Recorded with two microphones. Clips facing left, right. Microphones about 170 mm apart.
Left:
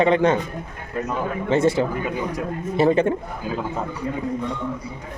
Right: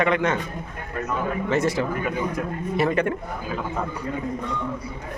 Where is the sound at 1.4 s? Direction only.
30° left (ahead or behind).